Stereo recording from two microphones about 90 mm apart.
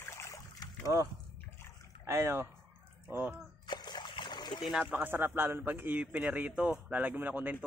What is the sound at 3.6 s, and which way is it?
Splash, 50° left (ahead or behind).